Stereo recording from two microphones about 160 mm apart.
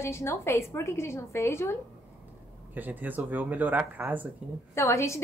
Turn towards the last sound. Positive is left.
turn(degrees=20)  # may be behind; listen again after turning